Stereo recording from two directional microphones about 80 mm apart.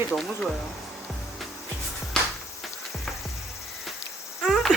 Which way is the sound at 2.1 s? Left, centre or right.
Centre.